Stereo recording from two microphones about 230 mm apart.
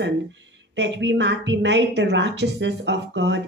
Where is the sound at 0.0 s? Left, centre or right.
Right.